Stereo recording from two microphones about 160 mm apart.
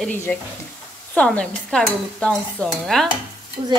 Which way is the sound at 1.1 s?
5° left (ahead or behind).